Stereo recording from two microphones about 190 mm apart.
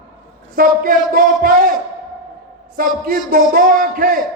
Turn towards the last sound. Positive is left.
turn(degrees=-50)  # may be behind; listen again after turning